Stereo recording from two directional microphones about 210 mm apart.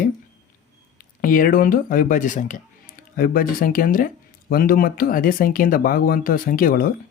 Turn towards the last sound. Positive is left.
turn(degrees=40)  # may be behind; listen again after turning